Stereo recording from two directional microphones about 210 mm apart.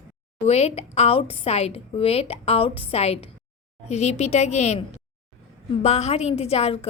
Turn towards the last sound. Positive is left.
turn(degrees=30)  # may be behind; listen again after turning